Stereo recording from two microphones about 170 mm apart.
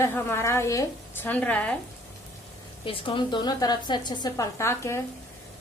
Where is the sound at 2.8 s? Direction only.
30° left (ahead or behind).